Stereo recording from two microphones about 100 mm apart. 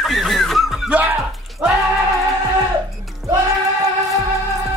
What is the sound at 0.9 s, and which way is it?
Music, 15° right (ahead or behind).